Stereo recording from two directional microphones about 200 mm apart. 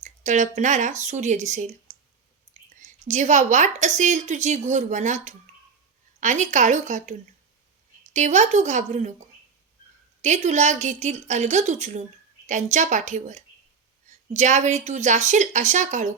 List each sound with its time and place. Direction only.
0.0 s a woman's voice: 35° right (ahead or behind)
2.8 s a woman's voice: 35° right (ahead or behind)
10.2 s a woman's voice: 35° right (ahead or behind)